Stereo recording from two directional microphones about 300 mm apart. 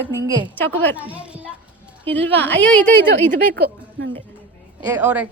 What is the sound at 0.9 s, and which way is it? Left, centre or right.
Speech, centre.